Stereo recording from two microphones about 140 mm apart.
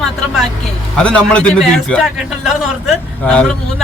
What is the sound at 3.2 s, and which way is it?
Speech, 10° left (ahead or behind).